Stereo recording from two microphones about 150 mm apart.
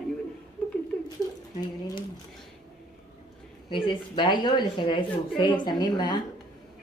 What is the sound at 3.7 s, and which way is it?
A woman's voice, 30° left (ahead or behind).